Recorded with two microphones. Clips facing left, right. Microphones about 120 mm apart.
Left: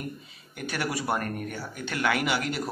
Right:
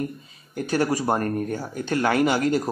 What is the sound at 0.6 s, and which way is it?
Speech, 35° right (ahead or behind).